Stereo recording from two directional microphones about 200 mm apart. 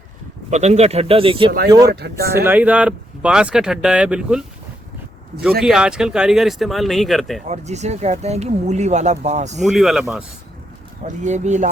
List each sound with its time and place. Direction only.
0.5 s speech: 35° right (ahead or behind)
1.9 s speech: 55° right (ahead or behind)
2.3 s speech: 10° right (ahead or behind)
5.6 s speech: 5° right (ahead or behind)
7.4 s speech: 35° right (ahead or behind)
9.6 s speech: centre (ahead or behind)
11.0 s speech: 35° right (ahead or behind)